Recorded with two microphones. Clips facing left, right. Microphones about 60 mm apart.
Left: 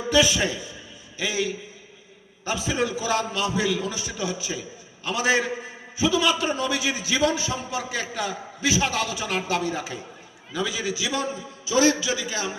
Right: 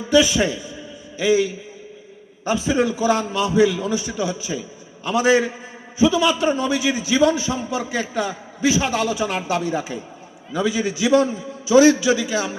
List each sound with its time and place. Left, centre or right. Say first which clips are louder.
0.1 s a man's voice: right 5 dB; right